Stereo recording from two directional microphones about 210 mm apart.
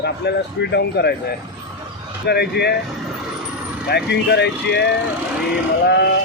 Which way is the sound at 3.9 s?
50° left (ahead or behind).